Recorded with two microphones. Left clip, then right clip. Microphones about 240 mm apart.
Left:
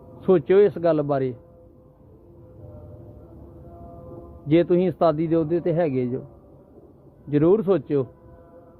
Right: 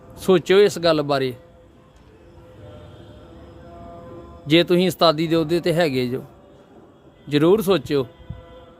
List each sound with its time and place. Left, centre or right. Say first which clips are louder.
0.2 s speech: right 2 dB; centre
4.4 s speech: right 2 dB; centre
7.3 s speech: right 2 dB; right